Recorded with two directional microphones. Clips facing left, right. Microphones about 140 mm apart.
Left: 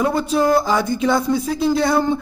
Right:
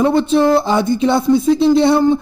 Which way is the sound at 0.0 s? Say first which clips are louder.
Right 5 dB; 25° right (ahead or behind).